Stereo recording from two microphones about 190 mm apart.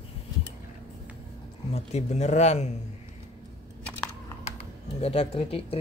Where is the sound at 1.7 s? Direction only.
35° left (ahead or behind).